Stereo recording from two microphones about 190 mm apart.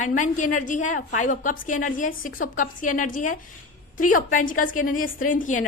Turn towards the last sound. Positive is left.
turn(degrees=45)  # may be behind; listen again after turning